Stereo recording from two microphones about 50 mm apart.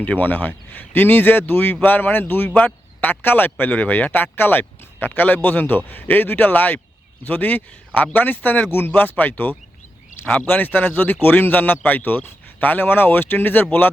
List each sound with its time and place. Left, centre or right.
0.0 s speech: left